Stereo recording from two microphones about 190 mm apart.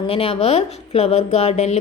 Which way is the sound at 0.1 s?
30° left (ahead or behind).